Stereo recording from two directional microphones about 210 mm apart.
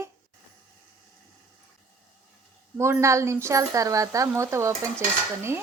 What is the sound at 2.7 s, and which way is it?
Speech, 10° right (ahead or behind).